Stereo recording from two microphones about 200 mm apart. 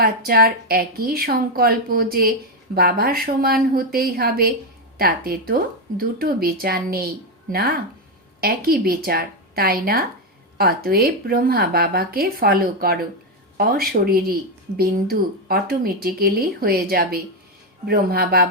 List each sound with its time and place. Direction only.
0.0 s speech: 50° right (ahead or behind)